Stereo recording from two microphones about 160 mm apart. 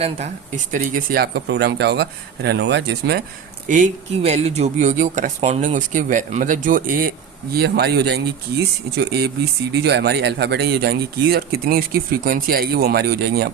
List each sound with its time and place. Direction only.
0.0 s speech: 45° right (ahead or behind); by 3.2 s 90° right
3.7 s speech: 50° right (ahead or behind)
7.5 s speech: 80° right